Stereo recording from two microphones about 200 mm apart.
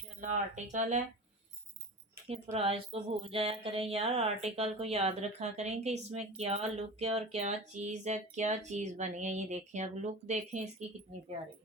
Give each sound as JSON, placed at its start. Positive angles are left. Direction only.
{"t": 0.2, "sound": "speech", "side_deg": -40}
{"t": 2.3, "sound": "a sound", "side_deg": -30}
{"t": 7.3, "sound": "speech", "side_deg": -35}